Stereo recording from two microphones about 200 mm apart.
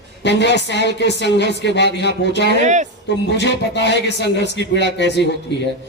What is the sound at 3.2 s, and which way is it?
Speech, 60° left (ahead or behind).